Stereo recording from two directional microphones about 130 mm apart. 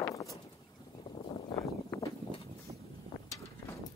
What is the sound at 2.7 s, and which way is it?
Boat, 55° right (ahead or behind).